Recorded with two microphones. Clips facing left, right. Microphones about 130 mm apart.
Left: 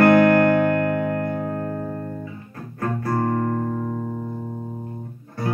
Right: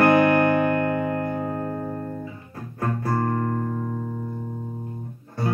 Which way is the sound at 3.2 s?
40° left (ahead or behind).